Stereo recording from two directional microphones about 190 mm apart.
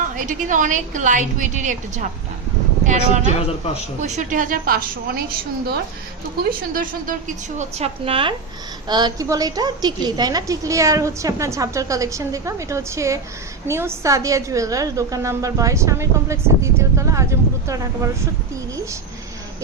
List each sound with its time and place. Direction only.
0.3 s a woman's voice: 40° right (ahead or behind)
6.5 s a woman's voice: 45° right (ahead or behind)
7.6 s a woman's voice: 30° right (ahead or behind); by 18.1 s 15° right (ahead or behind)